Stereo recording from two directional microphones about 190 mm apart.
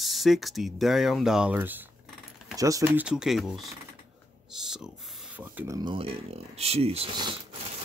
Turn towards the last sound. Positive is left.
turn(degrees=-30)  # may be behind; listen again after turning